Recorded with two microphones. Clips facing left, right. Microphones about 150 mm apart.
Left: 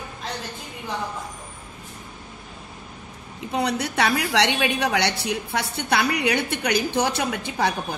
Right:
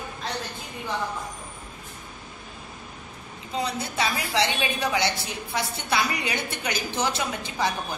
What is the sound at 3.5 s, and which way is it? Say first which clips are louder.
A woman's voice: left 4 dB; 65° left (ahead or behind).